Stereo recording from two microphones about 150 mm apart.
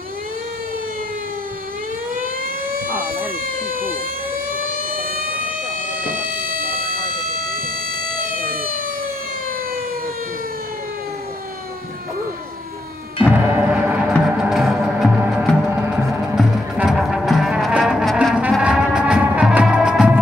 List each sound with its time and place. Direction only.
2.9 s siren: 10° right (ahead or behind)
4.6 s vehicle: 70° right (ahead or behind)
6.0 s siren: 70° right (ahead or behind)
8.2 s siren: 70° right (ahead or behind)
13.2 s music: 10° right (ahead or behind)
16.3 s music: 5° right (ahead or behind)